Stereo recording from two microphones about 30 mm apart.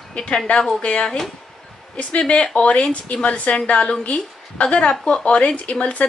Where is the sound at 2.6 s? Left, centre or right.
Left.